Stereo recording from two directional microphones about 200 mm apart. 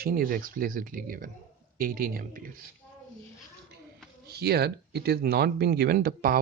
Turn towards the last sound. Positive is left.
turn(degrees=-50)  # may be behind; listen again after turning